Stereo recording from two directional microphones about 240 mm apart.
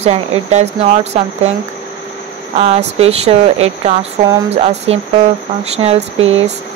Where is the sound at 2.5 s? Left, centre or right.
Right.